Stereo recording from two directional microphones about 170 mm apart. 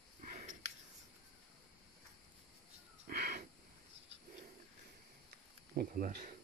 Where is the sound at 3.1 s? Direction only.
60° right (ahead or behind).